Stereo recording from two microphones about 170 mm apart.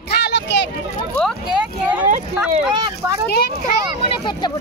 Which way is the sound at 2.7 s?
25° right (ahead or behind).